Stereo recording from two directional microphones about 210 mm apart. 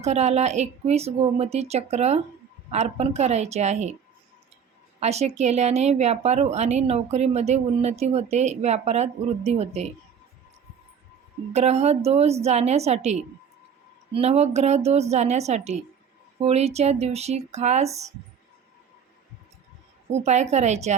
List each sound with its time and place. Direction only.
0.0 s speech: 30° right (ahead or behind)
4.9 s speech: 30° right (ahead or behind)
11.5 s speech: 30° right (ahead or behind)
20.1 s speech: 30° right (ahead or behind)